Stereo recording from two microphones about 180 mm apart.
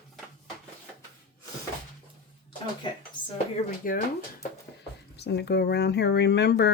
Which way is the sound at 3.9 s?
55° left (ahead or behind).